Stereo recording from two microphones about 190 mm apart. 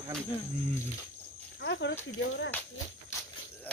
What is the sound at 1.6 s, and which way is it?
Speech, 65° left (ahead or behind).